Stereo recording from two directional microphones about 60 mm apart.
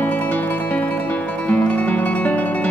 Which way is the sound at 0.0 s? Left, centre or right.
Left.